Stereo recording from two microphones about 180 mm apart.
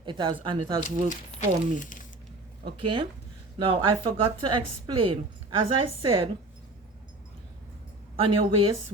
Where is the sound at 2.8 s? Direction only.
30° right (ahead or behind).